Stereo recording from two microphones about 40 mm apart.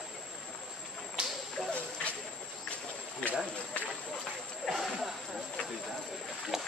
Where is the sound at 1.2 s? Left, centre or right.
Right.